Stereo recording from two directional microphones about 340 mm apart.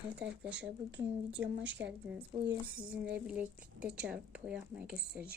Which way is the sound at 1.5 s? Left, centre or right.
Right.